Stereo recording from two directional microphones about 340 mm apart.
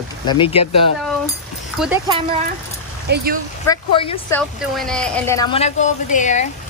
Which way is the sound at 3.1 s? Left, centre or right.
Right.